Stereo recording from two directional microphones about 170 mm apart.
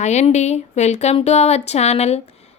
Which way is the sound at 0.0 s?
45° left (ahead or behind).